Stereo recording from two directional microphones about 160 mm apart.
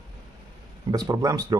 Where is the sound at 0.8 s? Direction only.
25° right (ahead or behind).